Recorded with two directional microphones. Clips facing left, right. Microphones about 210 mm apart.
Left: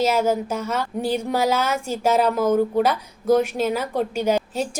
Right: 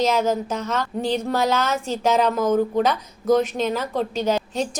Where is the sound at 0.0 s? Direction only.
10° left (ahead or behind).